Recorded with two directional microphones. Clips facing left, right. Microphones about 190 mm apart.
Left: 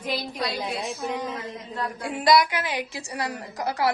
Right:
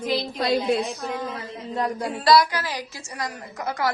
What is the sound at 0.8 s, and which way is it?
Speech, 15° left (ahead or behind).